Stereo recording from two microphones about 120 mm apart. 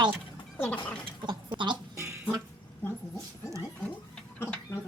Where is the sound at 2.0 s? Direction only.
20° right (ahead or behind).